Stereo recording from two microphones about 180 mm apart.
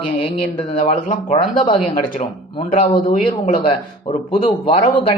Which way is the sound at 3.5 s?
30° left (ahead or behind).